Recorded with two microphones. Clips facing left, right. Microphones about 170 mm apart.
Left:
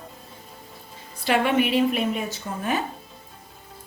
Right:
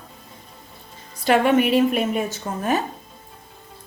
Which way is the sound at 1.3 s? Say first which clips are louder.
Right 4 dB; 45° right (ahead or behind).